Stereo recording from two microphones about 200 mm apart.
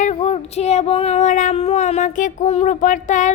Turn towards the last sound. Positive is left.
turn(degrees=40)  # may be behind; listen again after turning